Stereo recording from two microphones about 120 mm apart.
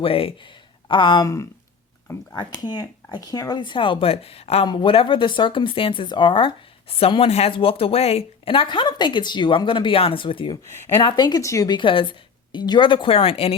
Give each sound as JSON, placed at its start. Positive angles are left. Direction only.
{"t": 0.0, "sound": "speech", "side_deg": 50}
{"t": 1.2, "sound": "speech", "side_deg": 25}
{"t": 4.6, "sound": "speech", "side_deg": 40}
{"t": 11.8, "sound": "speech", "side_deg": 45}